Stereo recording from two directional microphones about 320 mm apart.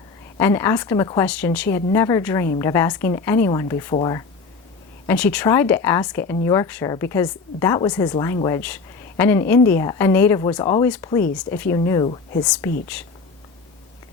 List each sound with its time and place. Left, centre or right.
0.3 s speech: centre